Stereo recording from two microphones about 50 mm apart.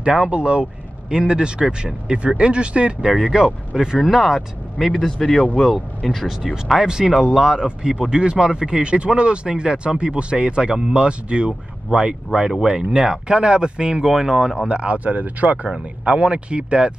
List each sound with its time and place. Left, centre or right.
0.3 s speech: right
3.2 s speech: centre
4.9 s speech: centre
14.7 s speech: right